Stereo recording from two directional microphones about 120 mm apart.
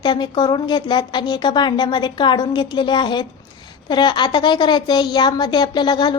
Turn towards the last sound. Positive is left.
turn(degrees=40)  # may be behind; listen again after turning